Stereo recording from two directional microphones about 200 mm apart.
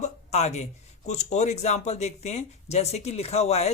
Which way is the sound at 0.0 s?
35° left (ahead or behind).